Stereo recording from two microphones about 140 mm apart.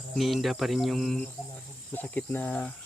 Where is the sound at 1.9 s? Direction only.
10° left (ahead or behind).